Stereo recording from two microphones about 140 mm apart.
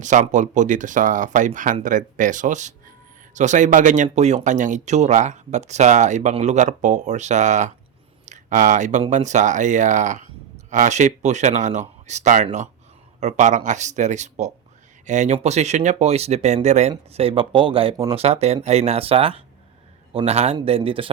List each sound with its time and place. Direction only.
0.0 s speech: 65° right (ahead or behind)
17.2 s speech: 45° right (ahead or behind)